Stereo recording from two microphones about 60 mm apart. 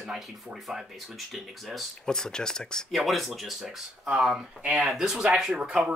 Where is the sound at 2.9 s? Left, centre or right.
Centre.